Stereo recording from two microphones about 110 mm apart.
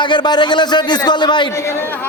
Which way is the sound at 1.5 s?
25° left (ahead or behind).